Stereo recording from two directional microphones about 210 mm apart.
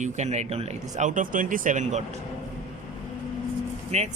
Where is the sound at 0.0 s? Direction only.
35° right (ahead or behind).